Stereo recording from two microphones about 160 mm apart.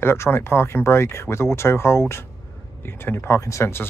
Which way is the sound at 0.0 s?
15° left (ahead or behind).